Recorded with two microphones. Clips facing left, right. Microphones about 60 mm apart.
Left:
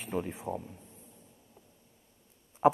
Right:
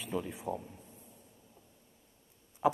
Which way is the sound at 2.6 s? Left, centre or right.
Left.